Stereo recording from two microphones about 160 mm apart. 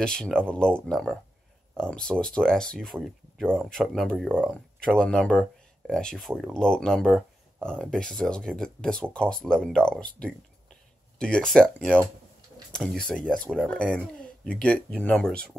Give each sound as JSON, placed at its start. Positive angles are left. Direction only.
{"t": 0.0, "sound": "speech", "side_deg": 5}
{"t": 13.9, "sound": "speech", "side_deg": 5}